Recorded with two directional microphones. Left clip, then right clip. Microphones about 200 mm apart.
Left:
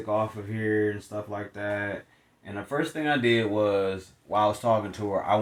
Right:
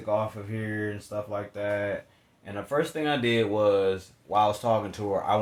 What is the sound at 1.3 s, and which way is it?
Speech, 30° right (ahead or behind).